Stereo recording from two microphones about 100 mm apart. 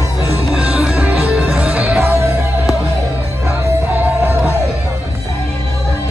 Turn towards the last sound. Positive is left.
turn(degrees=-15)  # may be behind; listen again after turning